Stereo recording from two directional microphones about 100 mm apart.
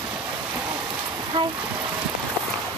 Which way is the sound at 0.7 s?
35° right (ahead or behind).